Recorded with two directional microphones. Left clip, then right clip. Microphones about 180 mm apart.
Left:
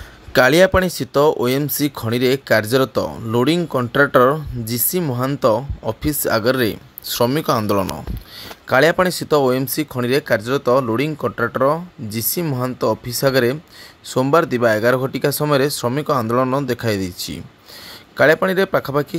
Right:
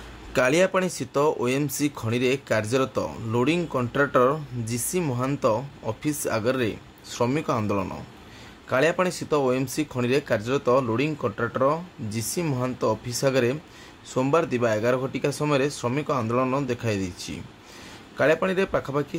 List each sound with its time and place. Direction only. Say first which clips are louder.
0.3 s speech: left 8 dB; 30° left (ahead or behind)